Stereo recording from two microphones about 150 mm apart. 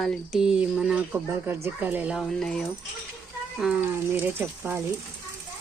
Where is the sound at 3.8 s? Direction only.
15° right (ahead or behind).